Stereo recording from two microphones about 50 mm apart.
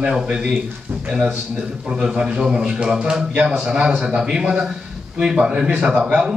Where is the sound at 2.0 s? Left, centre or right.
Centre.